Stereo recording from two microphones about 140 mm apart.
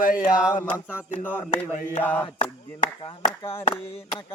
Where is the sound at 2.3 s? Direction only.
60° left (ahead or behind).